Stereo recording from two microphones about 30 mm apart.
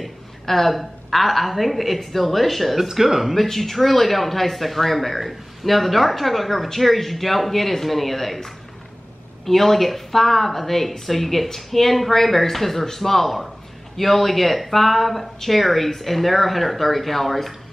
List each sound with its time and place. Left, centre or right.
0.0 s speech: centre
3.5 s speech: centre
9.5 s speech: centre